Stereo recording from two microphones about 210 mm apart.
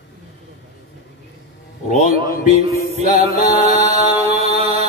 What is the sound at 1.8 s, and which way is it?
Mantra, 40° left (ahead or behind).